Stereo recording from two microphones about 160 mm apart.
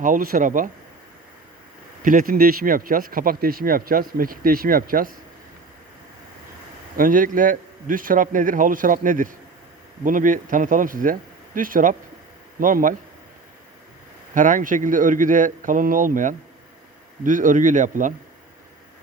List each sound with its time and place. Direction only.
0.0 s speech: 60° right (ahead or behind)
2.0 s speech: 60° right (ahead or behind)
6.9 s speech: 60° right (ahead or behind)
14.3 s speech: 55° right (ahead or behind)